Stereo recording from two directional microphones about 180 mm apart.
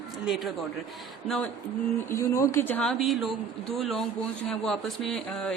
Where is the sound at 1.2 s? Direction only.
Centre (ahead or behind).